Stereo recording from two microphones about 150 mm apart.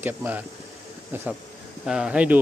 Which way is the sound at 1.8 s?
5° right (ahead or behind).